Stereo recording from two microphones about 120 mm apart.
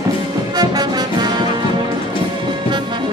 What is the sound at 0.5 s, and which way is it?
Music, 35° right (ahead or behind).